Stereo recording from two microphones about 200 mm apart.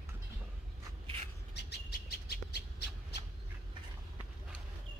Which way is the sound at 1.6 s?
55° left (ahead or behind).